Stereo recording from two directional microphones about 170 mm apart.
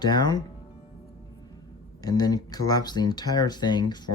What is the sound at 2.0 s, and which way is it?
Speech, 20° left (ahead or behind).